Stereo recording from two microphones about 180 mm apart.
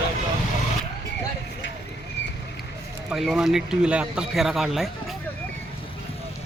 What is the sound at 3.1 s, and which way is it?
Speech, centre (ahead or behind).